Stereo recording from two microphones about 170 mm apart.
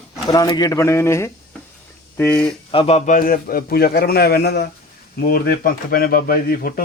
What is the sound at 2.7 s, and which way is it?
Speech, 35° left (ahead or behind).